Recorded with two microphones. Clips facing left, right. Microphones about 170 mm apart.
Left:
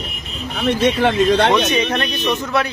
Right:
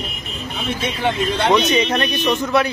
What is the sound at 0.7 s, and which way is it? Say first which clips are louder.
Speech: left 6 dB; 75° left (ahead or behind).